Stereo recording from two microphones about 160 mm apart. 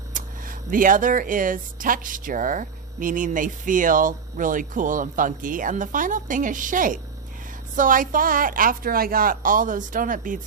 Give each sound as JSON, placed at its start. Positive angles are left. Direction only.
{"t": 0.1, "sound": "speech", "side_deg": -60}